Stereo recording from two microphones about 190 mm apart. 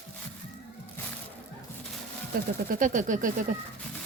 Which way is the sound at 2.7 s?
40° right (ahead or behind).